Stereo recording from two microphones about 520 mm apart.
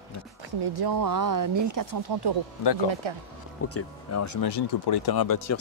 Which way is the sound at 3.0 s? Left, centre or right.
Right.